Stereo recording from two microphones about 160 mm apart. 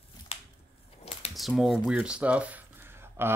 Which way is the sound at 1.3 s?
Centre (ahead or behind).